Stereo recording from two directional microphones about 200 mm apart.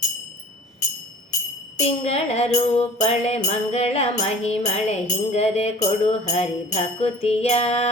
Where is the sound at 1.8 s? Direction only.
30° left (ahead or behind).